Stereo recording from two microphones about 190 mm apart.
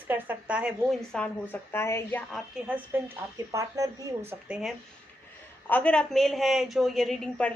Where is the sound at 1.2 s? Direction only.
10° left (ahead or behind).